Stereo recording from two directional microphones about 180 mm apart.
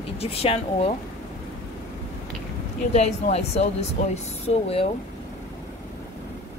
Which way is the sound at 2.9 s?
35° left (ahead or behind).